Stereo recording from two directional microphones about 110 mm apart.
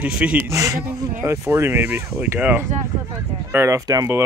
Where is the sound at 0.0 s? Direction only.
10° right (ahead or behind).